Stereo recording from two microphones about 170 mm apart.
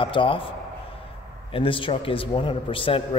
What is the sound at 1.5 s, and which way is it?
A man's voice, 30° left (ahead or behind).